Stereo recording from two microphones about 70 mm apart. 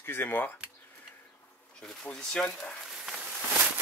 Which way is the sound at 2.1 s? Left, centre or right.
Centre.